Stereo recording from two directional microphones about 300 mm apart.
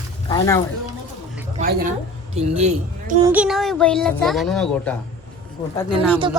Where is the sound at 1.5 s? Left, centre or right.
Right.